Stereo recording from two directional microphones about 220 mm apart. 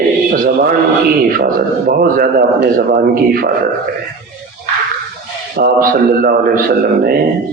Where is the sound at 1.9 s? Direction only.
40° right (ahead or behind).